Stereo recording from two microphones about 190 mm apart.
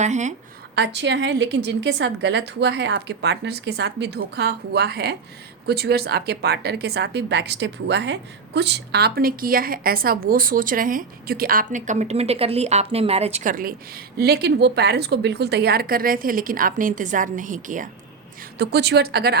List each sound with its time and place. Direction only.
0.0 s a woman's voice: 40° right (ahead or behind)
0.8 s a woman's voice: 65° right (ahead or behind); by 17.8 s 45° right (ahead or behind)
18.6 s a woman's voice: 60° right (ahead or behind)